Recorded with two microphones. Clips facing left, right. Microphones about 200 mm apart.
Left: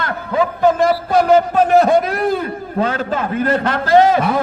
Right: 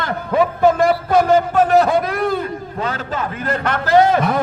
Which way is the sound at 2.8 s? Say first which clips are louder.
Left 5 dB; 50° left (ahead or behind).